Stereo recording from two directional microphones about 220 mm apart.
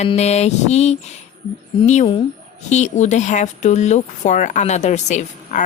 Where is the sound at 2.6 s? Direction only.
30° left (ahead or behind).